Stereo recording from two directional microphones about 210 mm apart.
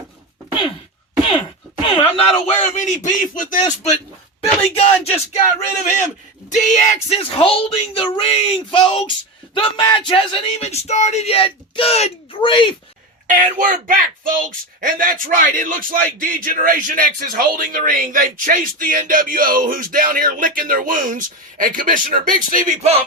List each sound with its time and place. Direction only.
2.0 s speech: 30° left (ahead or behind)
5.0 s a sound: 30° left (ahead or behind)
6.5 s speech: 35° left (ahead or behind)
13.2 s speech: 40° right (ahead or behind)